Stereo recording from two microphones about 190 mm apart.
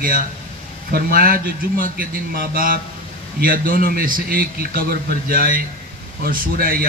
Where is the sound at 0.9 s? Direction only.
50° right (ahead or behind).